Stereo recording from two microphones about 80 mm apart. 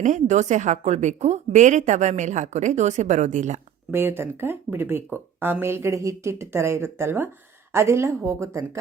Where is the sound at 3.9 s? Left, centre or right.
Right.